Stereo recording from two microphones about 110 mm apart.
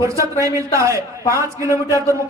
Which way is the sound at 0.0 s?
30° right (ahead or behind).